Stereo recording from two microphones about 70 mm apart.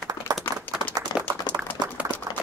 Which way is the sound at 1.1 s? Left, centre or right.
Left.